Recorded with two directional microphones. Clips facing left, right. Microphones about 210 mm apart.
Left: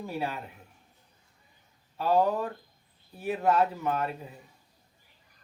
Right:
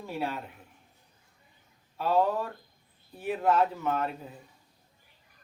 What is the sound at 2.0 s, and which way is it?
Speech, 10° left (ahead or behind).